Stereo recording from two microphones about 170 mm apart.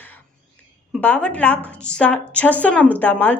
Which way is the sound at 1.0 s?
10° left (ahead or behind).